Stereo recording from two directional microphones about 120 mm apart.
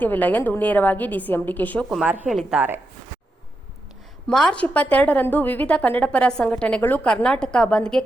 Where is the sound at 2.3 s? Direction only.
Centre (ahead or behind).